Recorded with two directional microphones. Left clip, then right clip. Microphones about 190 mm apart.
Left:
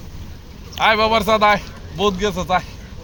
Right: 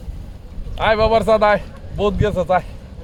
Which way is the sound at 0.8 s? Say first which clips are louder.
Even; 30° right (ahead or behind).